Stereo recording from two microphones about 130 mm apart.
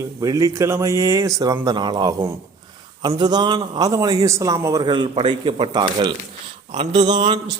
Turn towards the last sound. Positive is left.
turn(degrees=-35)  # may be behind; listen again after turning